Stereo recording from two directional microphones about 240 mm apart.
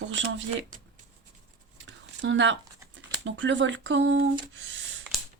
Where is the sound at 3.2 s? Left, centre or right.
Right.